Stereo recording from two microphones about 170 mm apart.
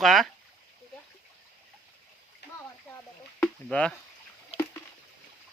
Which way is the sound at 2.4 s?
80° left.